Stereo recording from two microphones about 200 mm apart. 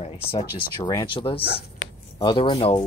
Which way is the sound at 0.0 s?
30° left (ahead or behind).